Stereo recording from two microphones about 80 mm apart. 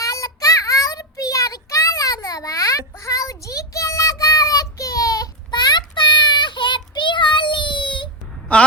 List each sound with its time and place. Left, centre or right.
0.0 s child singing: left
5.5 s child singing: left